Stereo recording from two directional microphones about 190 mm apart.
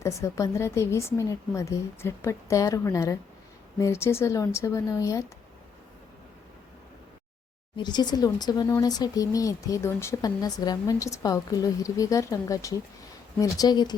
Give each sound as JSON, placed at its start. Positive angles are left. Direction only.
{"t": 0.0, "sound": "a woman's voice", "side_deg": 15}
{"t": 7.8, "sound": "speech", "side_deg": 20}